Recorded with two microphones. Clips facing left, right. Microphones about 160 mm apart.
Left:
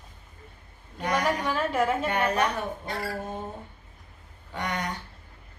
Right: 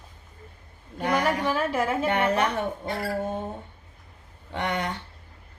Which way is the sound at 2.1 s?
25° right (ahead or behind).